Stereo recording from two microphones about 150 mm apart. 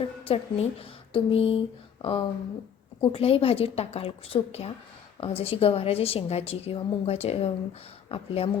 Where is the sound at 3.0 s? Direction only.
40° left (ahead or behind).